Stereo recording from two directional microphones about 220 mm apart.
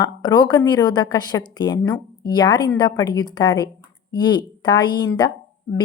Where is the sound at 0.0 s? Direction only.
20° left (ahead or behind).